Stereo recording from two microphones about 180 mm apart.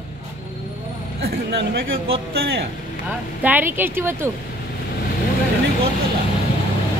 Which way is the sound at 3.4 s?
10° right (ahead or behind).